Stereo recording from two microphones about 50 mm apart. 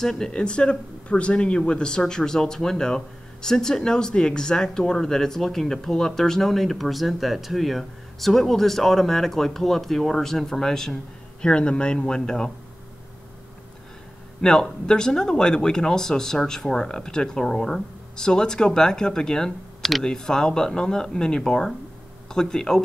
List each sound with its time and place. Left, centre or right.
0.0 s speech: centre
11.4 s a man's voice: left
14.4 s speech: centre